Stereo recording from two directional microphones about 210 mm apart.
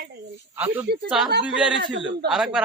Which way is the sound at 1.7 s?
55° right (ahead or behind).